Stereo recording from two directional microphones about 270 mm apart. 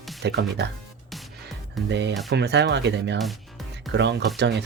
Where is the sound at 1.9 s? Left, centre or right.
Right.